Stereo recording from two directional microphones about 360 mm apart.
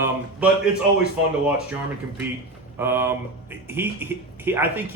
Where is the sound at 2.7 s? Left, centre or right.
Centre.